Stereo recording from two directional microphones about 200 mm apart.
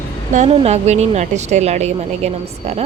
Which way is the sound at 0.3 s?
30° right (ahead or behind).